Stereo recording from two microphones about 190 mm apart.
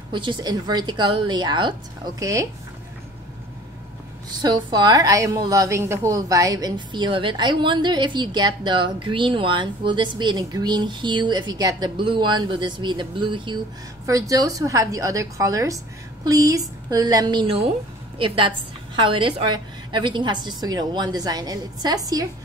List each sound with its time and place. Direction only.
0.1 s a woman's voice: 25° right (ahead or behind)
4.3 s a woman's voice: 20° right (ahead or behind)